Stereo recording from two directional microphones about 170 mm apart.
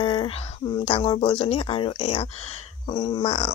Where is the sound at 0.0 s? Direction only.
30° left (ahead or behind).